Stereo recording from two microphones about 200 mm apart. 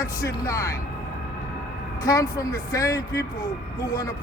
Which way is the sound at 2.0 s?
15° left (ahead or behind).